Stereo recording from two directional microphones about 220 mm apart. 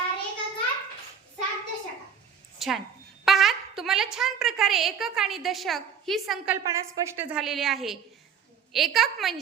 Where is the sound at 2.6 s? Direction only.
Centre (ahead or behind).